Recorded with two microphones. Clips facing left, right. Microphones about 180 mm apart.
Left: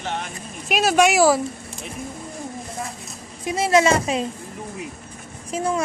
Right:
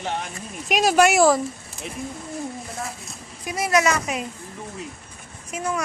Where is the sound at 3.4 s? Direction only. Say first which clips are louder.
Left 3 dB; 25° left (ahead or behind).